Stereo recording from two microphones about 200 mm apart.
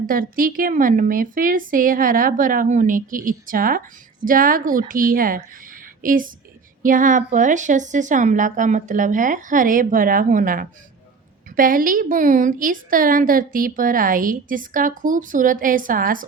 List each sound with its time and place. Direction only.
0.0 s a woman's voice: 45° right (ahead or behind)